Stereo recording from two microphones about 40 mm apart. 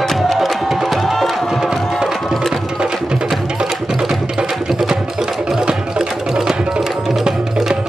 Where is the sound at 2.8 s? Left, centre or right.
Right.